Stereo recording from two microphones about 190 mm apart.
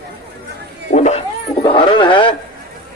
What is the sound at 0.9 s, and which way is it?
Speech, 35° left (ahead or behind).